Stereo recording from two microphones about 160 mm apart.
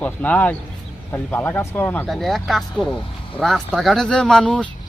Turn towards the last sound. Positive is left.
turn(degrees=5)  # may be behind; listen again after turning